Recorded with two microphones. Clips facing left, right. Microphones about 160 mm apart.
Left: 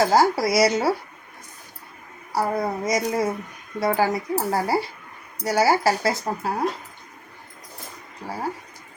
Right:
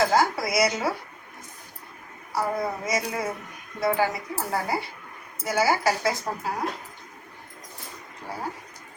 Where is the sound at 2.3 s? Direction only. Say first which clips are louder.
Left 3 dB; 35° left (ahead or behind).